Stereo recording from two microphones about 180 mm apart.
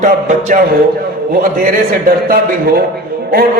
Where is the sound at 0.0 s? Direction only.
50° right (ahead or behind).